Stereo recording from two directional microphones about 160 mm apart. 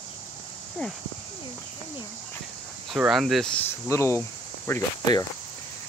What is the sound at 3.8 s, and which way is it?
Speech, 15° left (ahead or behind).